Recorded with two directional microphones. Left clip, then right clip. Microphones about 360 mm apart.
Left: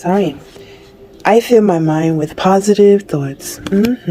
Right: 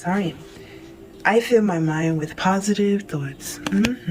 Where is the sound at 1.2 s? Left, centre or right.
Centre.